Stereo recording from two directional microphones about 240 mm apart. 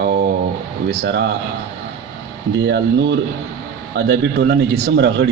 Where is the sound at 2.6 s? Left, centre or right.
Right.